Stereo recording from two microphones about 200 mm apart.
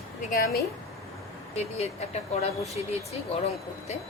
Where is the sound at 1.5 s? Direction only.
30° left (ahead or behind).